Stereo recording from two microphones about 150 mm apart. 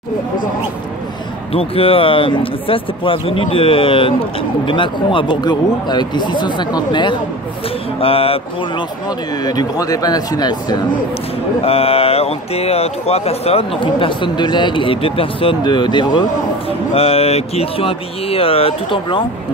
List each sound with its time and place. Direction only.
1.5 s speech: 40° left (ahead or behind)
9.4 s speech: 25° left (ahead or behind)
11.6 s speech: 40° left (ahead or behind)
16.9 s speech: 40° left (ahead or behind)